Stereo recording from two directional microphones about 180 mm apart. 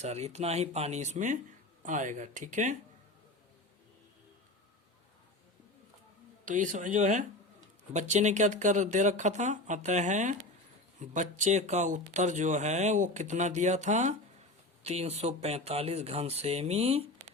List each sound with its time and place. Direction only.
0.0 s speech: 35° right (ahead or behind)
6.4 s speech: 45° right (ahead or behind)